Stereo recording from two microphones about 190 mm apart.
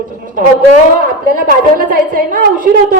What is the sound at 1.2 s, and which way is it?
A woman's voice, 50° right (ahead or behind).